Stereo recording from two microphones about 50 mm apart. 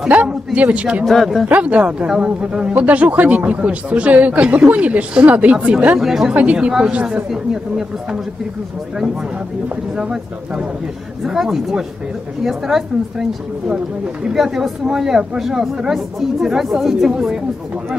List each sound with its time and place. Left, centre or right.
0.1 s a man's voice: right
1.0 s speech: centre
1.5 s a woman's voice: right
2.8 s speech: right
5.9 s a woman's voice: centre
6.3 s speech: right
7.2 s a woman's voice: centre
11.2 s a woman's voice: centre